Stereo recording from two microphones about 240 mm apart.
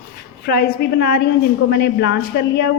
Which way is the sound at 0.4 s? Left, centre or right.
Left.